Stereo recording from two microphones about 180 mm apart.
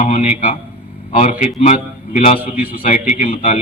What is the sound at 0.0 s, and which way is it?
A man's voice, 45° left (ahead or behind).